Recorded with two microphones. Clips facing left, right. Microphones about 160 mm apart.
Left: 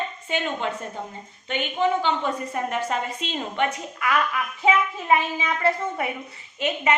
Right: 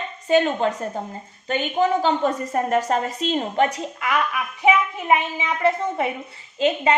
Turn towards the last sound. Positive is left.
turn(degrees=-30)  # may be behind; listen again after turning